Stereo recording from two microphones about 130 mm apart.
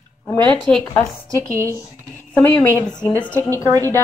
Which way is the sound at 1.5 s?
25° right (ahead or behind).